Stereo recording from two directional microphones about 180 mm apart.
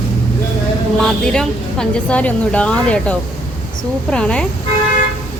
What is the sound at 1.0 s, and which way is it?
A woman's voice, 5° left (ahead or behind).